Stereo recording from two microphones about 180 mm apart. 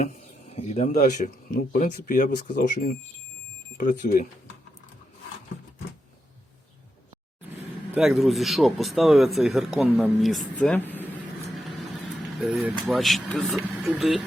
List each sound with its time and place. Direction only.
0.1 s speech: 35° left (ahead or behind)
7.9 s speech: centre (ahead or behind)
12.4 s speech: centre (ahead or behind)